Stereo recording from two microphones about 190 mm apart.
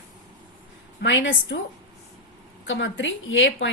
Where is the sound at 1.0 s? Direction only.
75° left (ahead or behind).